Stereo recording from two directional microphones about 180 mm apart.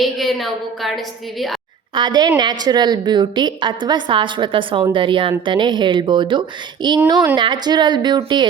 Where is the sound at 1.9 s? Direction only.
25° right (ahead or behind).